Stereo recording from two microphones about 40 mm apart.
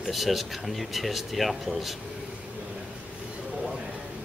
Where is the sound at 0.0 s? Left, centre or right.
Centre.